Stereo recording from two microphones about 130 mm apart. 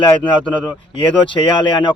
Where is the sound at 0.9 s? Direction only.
40° left (ahead or behind).